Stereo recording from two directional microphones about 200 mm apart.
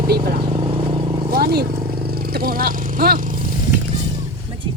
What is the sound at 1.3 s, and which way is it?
Speech, 50° right (ahead or behind).